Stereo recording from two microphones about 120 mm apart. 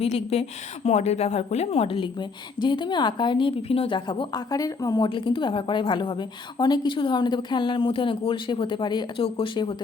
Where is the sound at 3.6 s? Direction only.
55° left (ahead or behind).